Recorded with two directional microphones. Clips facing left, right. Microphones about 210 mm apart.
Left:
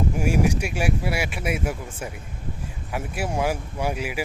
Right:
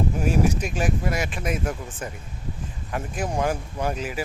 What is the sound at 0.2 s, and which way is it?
Speech, 10° left (ahead or behind).